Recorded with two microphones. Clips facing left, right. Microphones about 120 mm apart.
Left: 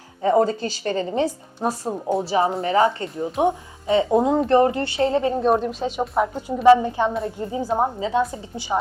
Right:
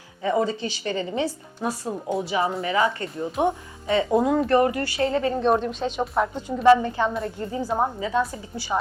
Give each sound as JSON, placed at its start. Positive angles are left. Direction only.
{"t": 0.2, "sound": "a woman's voice", "side_deg": 40}
{"t": 3.0, "sound": "speech", "side_deg": 15}
{"t": 5.3, "sound": "speech", "side_deg": 5}